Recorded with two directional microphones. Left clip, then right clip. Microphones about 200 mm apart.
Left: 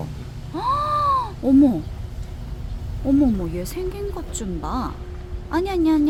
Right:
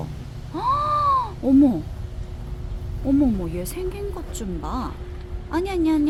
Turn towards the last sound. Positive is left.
turn(degrees=10)  # may be behind; listen again after turning